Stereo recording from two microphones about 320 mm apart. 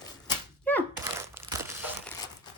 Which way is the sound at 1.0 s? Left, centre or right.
Centre.